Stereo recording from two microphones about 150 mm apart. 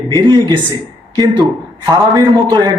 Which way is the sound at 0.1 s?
30° right (ahead or behind).